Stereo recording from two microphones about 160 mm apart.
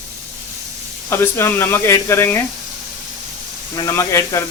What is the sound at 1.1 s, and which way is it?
Speech, 15° left (ahead or behind).